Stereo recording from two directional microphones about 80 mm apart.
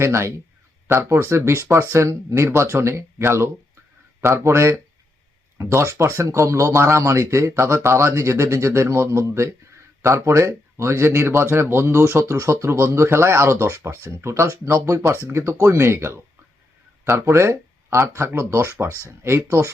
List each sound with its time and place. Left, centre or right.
0.0 s speech: right